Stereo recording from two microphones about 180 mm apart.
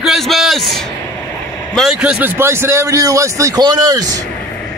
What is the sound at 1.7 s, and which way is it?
A man's voice, centre (ahead or behind).